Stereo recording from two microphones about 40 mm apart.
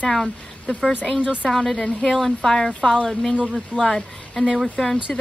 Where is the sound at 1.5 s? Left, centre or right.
Centre.